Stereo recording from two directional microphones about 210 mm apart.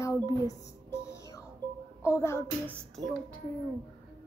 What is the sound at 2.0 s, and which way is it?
Speech, 10° left (ahead or behind).